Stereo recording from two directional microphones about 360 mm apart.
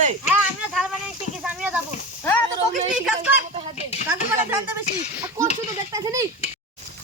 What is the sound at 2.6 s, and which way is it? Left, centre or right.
Speech, centre.